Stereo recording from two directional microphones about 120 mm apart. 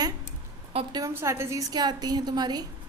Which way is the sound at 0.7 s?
50° right (ahead or behind).